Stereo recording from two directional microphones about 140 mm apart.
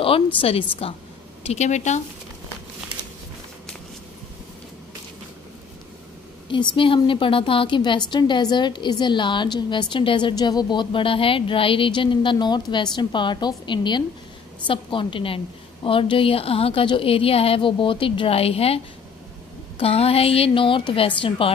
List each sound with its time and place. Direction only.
0.0 s a woman's voice: 40° left (ahead or behind); by 2.0 s 55° left (ahead or behind)
6.5 s a woman's voice: 35° left (ahead or behind)
19.8 s a woman's voice: 45° left (ahead or behind)